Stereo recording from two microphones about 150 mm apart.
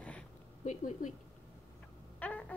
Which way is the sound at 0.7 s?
55° left (ahead or behind).